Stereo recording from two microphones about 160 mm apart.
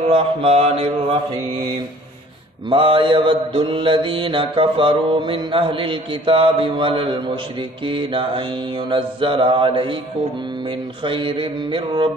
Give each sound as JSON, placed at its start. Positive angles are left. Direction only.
{"t": 0.1, "sound": "mantra", "side_deg": -35}
{"t": 2.7, "sound": "mantra", "side_deg": -35}
{"t": 11.1, "sound": "mantra", "side_deg": -35}